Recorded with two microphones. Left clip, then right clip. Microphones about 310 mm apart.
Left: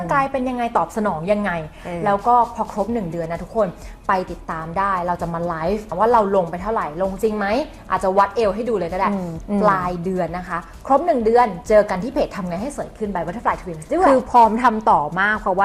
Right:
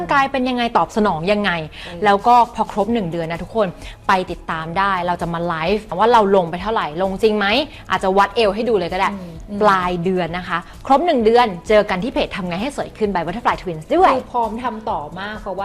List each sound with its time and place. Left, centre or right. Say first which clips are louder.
0.1 s a woman's voice: right 3 dB; right
12.6 s a woman's voice: right 5 dB; right
14.5 s a woman's voice: left 7 dB; centre